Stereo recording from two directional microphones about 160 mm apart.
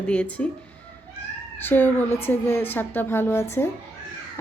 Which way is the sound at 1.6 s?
10° left (ahead or behind).